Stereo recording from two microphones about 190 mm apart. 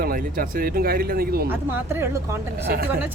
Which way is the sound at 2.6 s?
50° right (ahead or behind).